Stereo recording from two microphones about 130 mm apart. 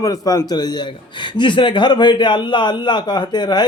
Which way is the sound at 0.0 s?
25° left (ahead or behind).